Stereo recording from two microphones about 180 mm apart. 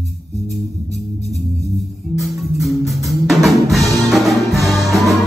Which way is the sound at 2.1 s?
Centre (ahead or behind).